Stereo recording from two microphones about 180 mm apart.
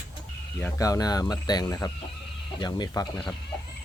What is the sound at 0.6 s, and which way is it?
Speech, 20° left (ahead or behind).